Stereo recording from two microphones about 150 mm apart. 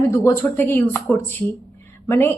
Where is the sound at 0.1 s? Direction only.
20° left (ahead or behind).